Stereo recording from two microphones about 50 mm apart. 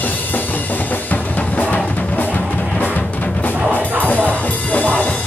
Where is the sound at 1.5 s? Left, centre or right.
Left.